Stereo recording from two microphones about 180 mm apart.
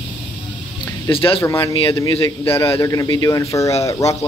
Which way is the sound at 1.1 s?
30° left (ahead or behind).